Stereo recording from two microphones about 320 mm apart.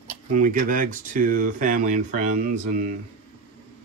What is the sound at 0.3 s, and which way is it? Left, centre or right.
Speech, right.